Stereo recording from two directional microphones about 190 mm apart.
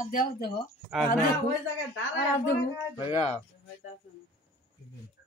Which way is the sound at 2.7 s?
25° left (ahead or behind).